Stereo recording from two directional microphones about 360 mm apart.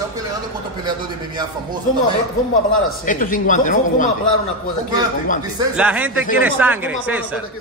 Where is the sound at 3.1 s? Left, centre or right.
Left.